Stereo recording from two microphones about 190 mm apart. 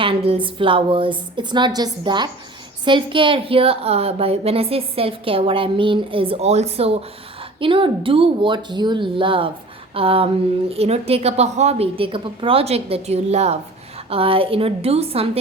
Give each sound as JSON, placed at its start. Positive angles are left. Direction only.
{"t": 0.0, "sound": "a woman's voice", "side_deg": -30}